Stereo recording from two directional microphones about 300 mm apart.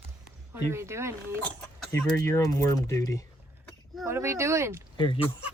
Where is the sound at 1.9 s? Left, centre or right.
Centre.